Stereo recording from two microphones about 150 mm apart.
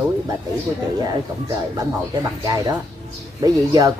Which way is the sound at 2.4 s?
25° right (ahead or behind).